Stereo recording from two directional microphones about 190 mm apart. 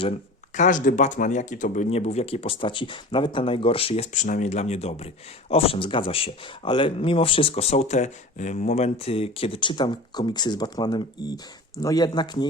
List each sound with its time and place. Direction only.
0.5 s speech: 40° left (ahead or behind); by 12.5 s 25° left (ahead or behind)